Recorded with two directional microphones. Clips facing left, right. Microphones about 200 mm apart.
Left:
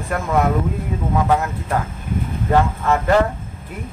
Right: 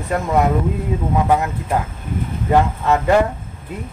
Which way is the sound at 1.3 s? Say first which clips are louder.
Right 1 dB; 15° right (ahead or behind).